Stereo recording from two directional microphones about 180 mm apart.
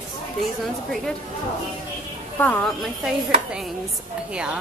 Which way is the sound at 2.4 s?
10° left (ahead or behind).